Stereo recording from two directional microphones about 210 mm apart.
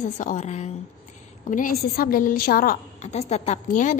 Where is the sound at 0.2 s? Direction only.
35° left (ahead or behind).